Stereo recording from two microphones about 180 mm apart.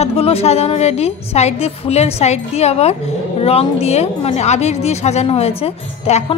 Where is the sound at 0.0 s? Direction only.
35° left (ahead or behind).